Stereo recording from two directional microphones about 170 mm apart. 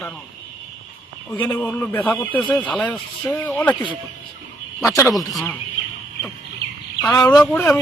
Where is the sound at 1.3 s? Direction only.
10° left (ahead or behind).